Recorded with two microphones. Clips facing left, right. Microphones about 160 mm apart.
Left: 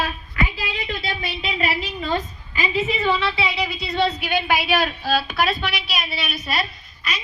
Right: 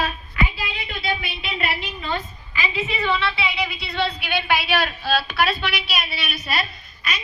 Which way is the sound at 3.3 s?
40° left (ahead or behind).